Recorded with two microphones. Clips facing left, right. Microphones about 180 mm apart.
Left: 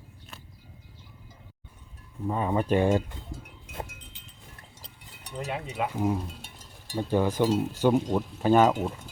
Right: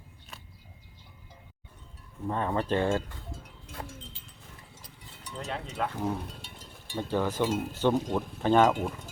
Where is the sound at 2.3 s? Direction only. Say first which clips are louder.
Left 3 dB; 10° left (ahead or behind).